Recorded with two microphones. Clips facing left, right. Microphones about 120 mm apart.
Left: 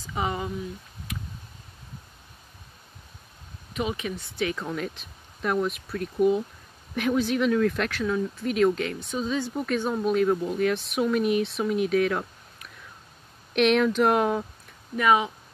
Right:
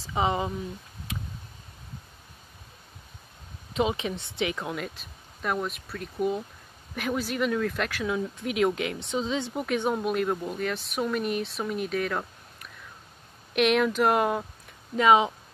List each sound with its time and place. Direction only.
0.0 s speech: 25° right (ahead or behind)
3.7 s speech: 25° right (ahead or behind)
4.4 s speech: 15° right (ahead or behind)
15.0 s speech: 25° right (ahead or behind)